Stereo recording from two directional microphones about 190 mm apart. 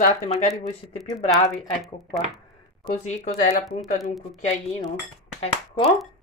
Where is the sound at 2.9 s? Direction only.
40° left (ahead or behind).